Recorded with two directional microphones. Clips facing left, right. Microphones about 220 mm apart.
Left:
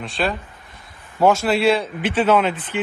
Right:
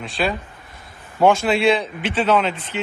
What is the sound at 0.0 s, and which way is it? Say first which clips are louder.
A man's voice: even; centre (ahead or behind).